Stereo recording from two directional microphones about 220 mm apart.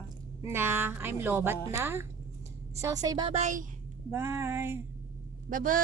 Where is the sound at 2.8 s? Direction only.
15° right (ahead or behind); by 3.7 s 35° right (ahead or behind).